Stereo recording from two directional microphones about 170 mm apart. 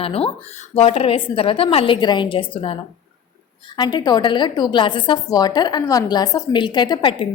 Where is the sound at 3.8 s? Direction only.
25° left (ahead or behind).